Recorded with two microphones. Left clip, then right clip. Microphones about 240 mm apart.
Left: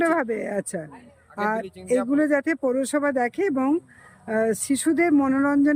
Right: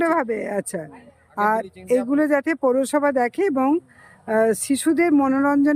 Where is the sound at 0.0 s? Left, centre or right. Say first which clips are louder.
Right 2 dB; centre.